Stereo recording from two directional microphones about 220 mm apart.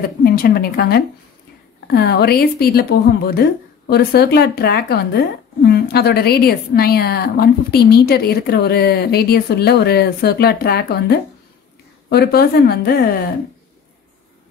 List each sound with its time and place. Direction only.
0.2 s a woman's voice: 45° left (ahead or behind)